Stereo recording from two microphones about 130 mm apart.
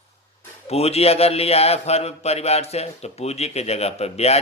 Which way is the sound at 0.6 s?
50° left (ahead or behind).